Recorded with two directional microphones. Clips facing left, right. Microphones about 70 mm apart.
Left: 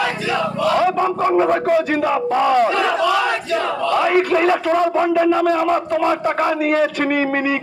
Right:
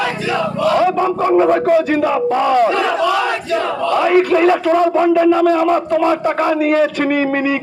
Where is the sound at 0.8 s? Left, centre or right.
Centre.